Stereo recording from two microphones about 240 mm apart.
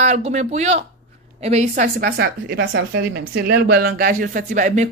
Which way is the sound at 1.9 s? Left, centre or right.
Right.